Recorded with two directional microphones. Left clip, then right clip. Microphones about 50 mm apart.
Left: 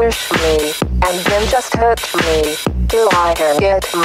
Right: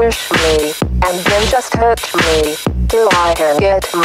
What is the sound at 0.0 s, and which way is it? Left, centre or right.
Music, left.